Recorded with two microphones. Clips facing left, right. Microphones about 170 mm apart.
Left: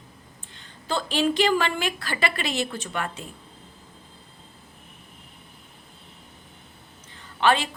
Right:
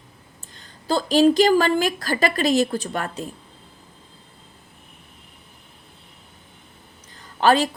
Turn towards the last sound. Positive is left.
turn(degrees=-40)  # may be behind; listen again after turning